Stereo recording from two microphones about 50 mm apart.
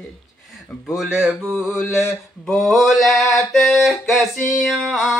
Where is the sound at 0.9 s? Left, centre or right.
Centre.